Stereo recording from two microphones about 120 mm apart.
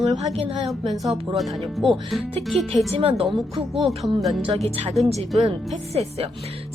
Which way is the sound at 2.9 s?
55° right (ahead or behind).